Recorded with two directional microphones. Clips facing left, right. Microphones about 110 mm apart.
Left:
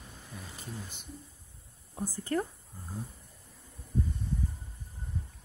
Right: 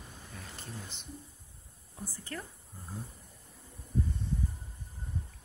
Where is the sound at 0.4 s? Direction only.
10° left (ahead or behind).